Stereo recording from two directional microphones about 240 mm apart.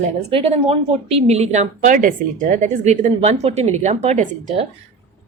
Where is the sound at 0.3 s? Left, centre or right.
Right.